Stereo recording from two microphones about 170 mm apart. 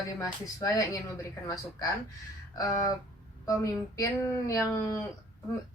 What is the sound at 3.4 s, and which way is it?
A woman's voice, 20° left (ahead or behind).